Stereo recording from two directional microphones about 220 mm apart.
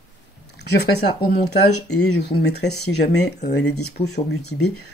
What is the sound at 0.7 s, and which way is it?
Speech, 45° left (ahead or behind).